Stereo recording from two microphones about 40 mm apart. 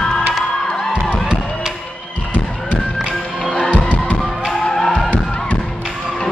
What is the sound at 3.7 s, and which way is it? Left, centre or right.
Music, left.